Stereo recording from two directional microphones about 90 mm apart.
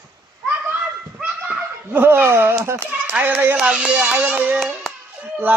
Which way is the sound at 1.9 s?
25° right (ahead or behind).